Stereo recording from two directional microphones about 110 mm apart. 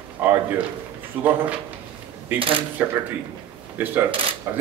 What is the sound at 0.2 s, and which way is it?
Speech, 15° right (ahead or behind).